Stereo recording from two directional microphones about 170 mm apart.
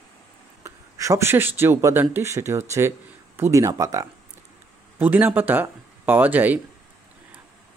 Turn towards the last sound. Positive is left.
turn(degrees=-10)  # may be behind; listen again after turning